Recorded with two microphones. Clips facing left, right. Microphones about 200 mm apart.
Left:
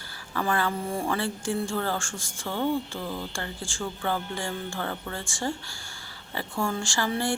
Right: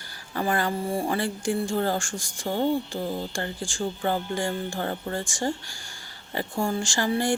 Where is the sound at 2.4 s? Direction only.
35° right (ahead or behind).